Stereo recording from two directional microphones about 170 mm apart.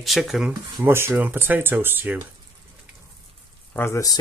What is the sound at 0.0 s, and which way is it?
Speech, centre (ahead or behind).